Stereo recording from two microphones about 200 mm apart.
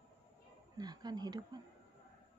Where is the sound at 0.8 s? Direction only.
20° right (ahead or behind).